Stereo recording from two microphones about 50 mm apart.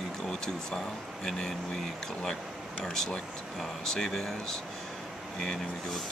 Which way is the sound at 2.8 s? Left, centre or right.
Centre.